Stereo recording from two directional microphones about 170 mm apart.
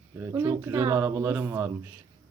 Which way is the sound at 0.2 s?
15° right (ahead or behind).